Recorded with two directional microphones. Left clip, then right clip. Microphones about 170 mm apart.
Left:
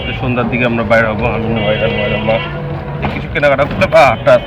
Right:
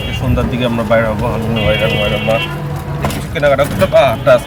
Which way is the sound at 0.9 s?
15° right (ahead or behind).